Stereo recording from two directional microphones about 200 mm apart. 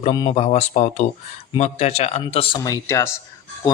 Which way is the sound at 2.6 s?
15° left (ahead or behind).